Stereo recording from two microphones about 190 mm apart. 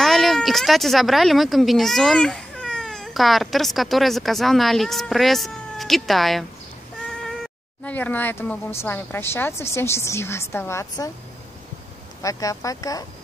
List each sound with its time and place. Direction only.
0.0 s speech: centre (ahead or behind)
7.8 s a woman's voice: 10° left (ahead or behind)
12.2 s a woman's voice: 15° left (ahead or behind)